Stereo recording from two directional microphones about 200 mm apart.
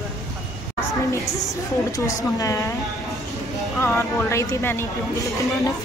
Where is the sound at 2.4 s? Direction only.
15° left (ahead or behind).